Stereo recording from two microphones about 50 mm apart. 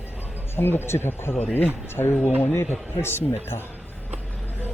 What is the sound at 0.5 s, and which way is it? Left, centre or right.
Speech, left.